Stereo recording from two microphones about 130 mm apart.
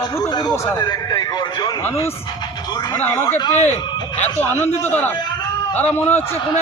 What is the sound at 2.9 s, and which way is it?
Speech, 15° left (ahead or behind).